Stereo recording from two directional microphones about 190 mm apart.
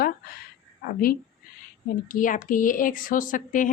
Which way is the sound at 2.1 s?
45° left (ahead or behind).